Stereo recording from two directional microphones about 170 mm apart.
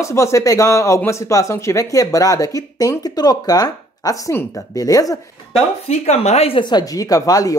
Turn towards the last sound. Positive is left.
turn(degrees=20)  # may be behind; listen again after turning